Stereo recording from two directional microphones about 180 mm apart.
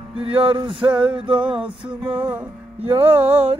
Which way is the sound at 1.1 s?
30° right (ahead or behind).